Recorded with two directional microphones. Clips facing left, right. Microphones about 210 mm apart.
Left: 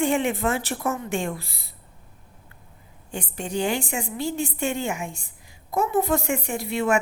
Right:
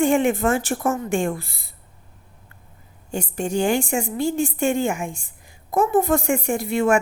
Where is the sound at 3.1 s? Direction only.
45° right (ahead or behind).